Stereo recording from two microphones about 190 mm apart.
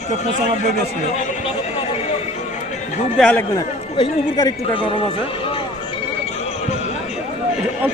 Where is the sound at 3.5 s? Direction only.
20° left (ahead or behind).